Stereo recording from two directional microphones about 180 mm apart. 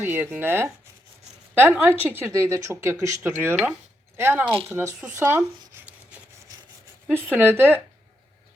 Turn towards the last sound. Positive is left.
turn(degrees=-10)  # may be behind; listen again after turning